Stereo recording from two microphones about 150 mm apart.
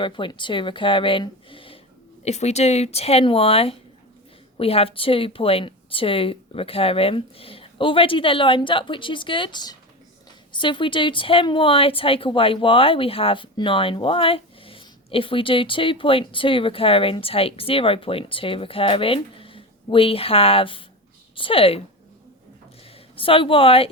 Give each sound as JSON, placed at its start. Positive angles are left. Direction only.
{"t": 0.0, "sound": "a woman's voice", "side_deg": 35}
{"t": 2.2, "sound": "a woman's voice", "side_deg": 45}
{"t": 23.1, "sound": "a woman's voice", "side_deg": 35}